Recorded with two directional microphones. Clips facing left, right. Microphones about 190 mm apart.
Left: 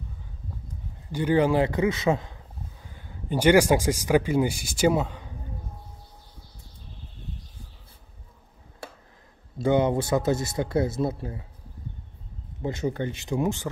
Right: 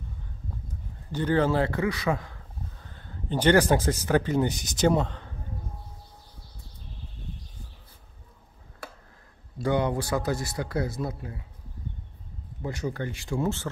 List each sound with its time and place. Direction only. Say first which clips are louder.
1.1 s a man's voice: left 2 dB; 10° left (ahead or behind)
2.8 s speech: right 1 dB; 10° left (ahead or behind)
9.6 s speech: left 4 dB; 20° left (ahead or behind)
12.6 s speech: left 4 dB; 20° left (ahead or behind)